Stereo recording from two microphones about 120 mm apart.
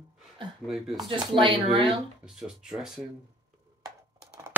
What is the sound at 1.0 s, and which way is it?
Speech, 45° right (ahead or behind).